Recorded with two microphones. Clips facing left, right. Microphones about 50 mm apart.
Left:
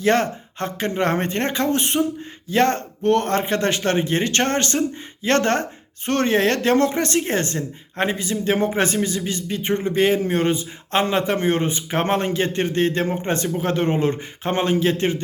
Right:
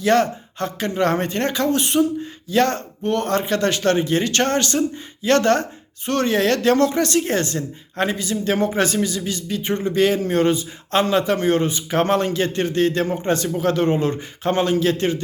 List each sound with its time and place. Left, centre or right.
0.0 s speech: left
3.0 s speech: left
3.2 s speech: left